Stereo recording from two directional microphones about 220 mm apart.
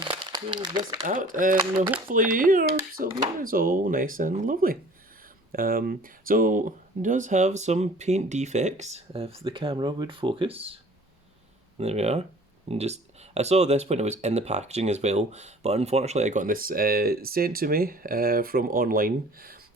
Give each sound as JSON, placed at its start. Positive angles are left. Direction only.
{"t": 0.0, "sound": "crumpling", "side_deg": -20}
{"t": 1.0, "sound": "speech", "side_deg": -35}
{"t": 11.8, "sound": "speech", "side_deg": -30}